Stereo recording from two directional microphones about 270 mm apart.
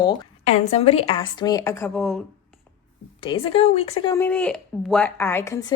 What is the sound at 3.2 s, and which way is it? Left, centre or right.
Speech, centre.